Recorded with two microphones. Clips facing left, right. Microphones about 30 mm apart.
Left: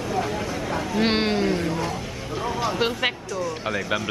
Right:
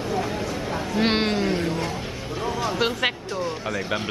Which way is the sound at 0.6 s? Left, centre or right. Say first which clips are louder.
Left 1 dB; centre.